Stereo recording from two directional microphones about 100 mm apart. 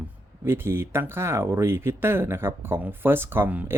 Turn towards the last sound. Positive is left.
turn(degrees=-20)  # may be behind; listen again after turning